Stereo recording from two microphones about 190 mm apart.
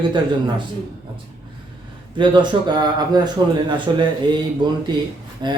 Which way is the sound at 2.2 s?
25° right (ahead or behind).